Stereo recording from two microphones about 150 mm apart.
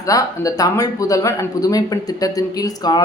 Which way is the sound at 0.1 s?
20° left (ahead or behind).